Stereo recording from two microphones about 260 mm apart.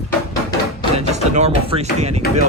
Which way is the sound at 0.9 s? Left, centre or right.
Right.